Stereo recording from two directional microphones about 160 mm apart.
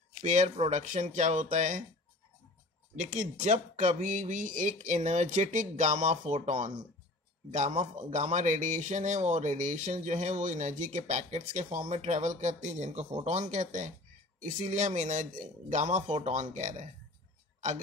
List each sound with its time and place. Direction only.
0.2 s speech: 45° right (ahead or behind)
3.0 s speech: 50° right (ahead or behind)